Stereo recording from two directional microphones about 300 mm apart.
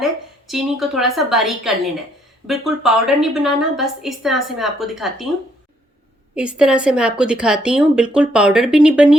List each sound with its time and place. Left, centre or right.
0.0 s a woman's voice: centre
6.3 s a woman's voice: centre